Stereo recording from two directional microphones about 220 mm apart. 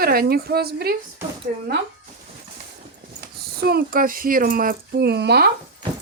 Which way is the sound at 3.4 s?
45° right (ahead or behind).